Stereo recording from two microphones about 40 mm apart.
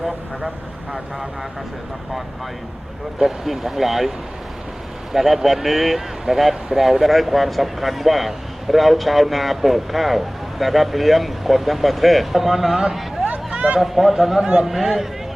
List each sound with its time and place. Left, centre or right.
3.2 s speech: centre
5.1 s speech: centre
13.7 s speech: centre
14.4 s a man's voice: centre
14.7 s speech: centre